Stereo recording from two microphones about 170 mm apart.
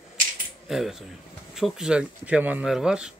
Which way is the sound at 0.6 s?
Centre (ahead or behind).